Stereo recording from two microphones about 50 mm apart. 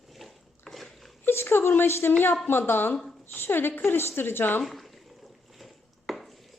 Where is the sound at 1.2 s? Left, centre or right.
Left.